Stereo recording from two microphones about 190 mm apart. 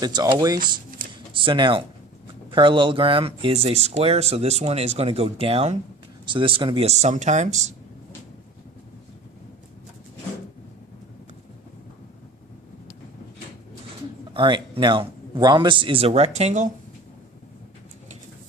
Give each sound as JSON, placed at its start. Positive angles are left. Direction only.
{"t": 0.0, "sound": "a man's voice", "side_deg": -20}
{"t": 14.3, "sound": "a man's voice", "side_deg": -25}